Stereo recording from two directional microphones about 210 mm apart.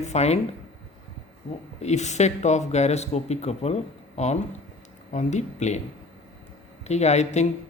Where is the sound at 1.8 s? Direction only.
35° left (ahead or behind).